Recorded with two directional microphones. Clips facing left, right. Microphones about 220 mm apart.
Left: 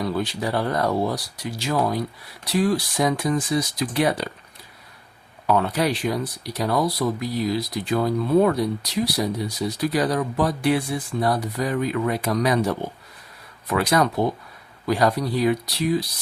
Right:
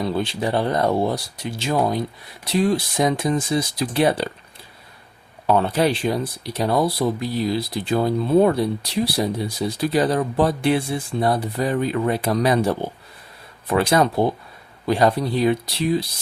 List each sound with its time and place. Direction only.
0.0 s speech: 25° right (ahead or behind)
5.5 s speech: 30° right (ahead or behind)